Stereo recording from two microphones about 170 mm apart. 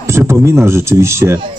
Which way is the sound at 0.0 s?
15° right (ahead or behind).